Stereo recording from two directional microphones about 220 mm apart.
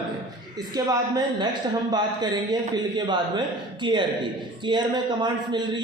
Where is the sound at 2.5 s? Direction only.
20° right (ahead or behind).